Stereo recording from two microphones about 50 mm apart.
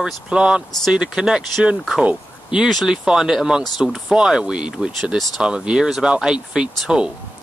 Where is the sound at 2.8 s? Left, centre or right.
Centre.